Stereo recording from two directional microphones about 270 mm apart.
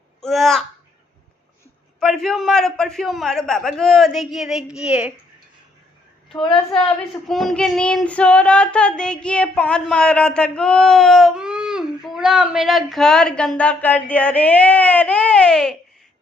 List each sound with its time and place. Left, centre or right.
0.2 s speech: centre
2.0 s child singing: centre
6.4 s speech: centre
7.3 s child singing: centre